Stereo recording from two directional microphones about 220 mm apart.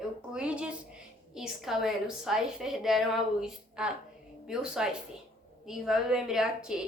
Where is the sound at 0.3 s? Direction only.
5° right (ahead or behind).